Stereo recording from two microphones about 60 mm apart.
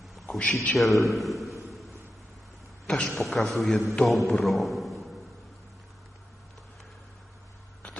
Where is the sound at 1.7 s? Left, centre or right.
Centre.